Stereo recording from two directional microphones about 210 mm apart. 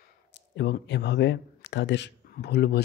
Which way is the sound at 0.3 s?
55° left (ahead or behind).